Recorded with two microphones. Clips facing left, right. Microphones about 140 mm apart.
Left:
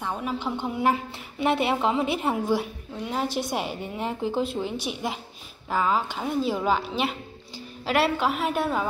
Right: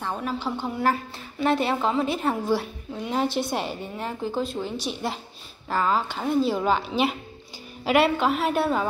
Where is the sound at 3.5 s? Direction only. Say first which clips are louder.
Even; 10° left (ahead or behind).